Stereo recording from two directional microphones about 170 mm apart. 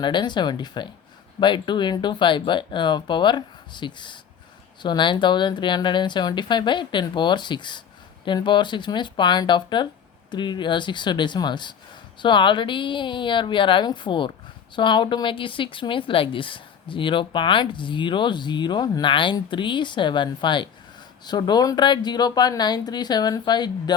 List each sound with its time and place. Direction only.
0.0 s a woman's voice: 25° left (ahead or behind)